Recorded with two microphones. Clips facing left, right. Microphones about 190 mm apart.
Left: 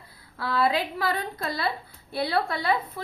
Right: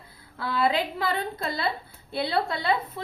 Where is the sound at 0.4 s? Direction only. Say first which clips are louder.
Even; 25° right (ahead or behind).